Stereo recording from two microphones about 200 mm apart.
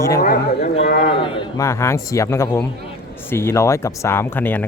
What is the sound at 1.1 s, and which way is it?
A man's voice, 25° left (ahead or behind).